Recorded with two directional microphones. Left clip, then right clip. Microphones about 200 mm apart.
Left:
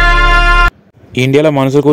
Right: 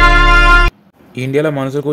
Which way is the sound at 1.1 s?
40° left (ahead or behind).